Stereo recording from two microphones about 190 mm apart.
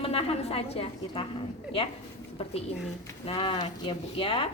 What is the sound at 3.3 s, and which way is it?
A woman's voice, 25° left (ahead or behind).